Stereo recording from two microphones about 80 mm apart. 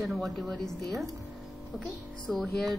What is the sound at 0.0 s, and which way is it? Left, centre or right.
Speech, centre.